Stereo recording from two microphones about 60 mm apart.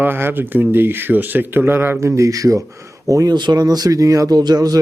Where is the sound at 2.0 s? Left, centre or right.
Right.